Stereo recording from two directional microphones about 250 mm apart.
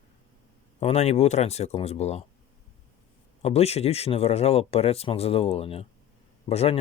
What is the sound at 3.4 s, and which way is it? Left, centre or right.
Speech, left.